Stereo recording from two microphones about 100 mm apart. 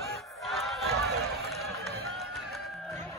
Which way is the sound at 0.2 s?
Centre (ahead or behind).